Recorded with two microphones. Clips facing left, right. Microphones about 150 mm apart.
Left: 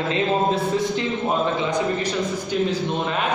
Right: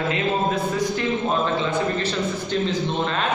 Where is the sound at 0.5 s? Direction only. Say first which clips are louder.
Left 1 dB; 20° left (ahead or behind).